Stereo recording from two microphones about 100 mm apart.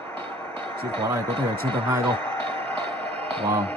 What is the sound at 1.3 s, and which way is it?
Speech, 60° right (ahead or behind).